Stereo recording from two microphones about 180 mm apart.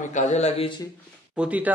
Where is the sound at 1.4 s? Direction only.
10° right (ahead or behind).